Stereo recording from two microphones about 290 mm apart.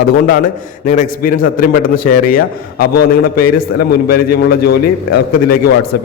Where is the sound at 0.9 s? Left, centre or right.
Left.